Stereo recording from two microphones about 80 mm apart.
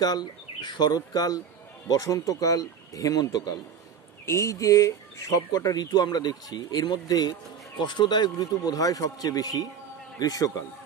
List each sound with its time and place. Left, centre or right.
0.0 s speech: left
4.3 s speech: left